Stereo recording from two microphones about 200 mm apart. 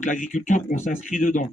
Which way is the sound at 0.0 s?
40° left (ahead or behind).